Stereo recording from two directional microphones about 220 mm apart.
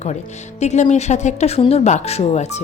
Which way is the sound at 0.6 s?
30° left (ahead or behind).